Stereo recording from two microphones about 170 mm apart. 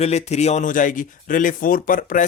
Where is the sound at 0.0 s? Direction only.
40° left (ahead or behind).